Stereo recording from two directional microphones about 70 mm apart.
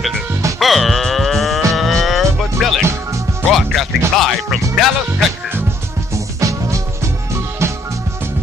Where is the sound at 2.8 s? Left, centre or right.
Right.